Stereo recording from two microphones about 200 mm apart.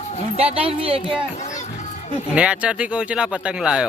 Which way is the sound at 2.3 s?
5° right (ahead or behind).